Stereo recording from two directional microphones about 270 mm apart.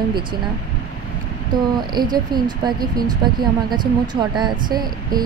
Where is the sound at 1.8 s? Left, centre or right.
Centre.